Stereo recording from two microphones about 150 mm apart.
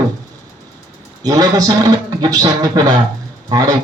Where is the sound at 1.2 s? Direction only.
25° right (ahead or behind).